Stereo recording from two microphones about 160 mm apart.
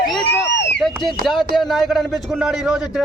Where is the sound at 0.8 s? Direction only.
Centre (ahead or behind).